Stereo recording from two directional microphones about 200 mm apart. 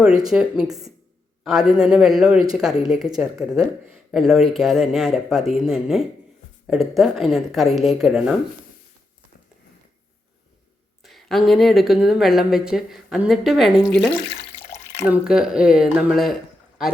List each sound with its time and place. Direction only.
0.3 s speech: 5° right (ahead or behind)
11.0 s speech: centre (ahead or behind)
14.3 s water: 35° left (ahead or behind)
15.0 s speech: 5° right (ahead or behind)